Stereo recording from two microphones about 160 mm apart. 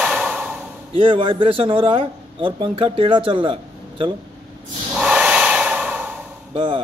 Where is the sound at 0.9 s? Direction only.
35° right (ahead or behind).